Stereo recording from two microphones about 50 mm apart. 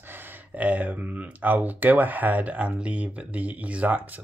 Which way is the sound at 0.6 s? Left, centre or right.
Right.